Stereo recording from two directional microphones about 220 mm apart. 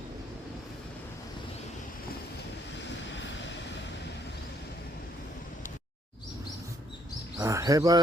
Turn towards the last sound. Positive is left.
turn(degrees=-15)  # may be behind; listen again after turning